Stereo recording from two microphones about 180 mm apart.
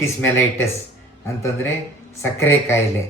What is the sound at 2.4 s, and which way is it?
Speech, 15° left (ahead or behind).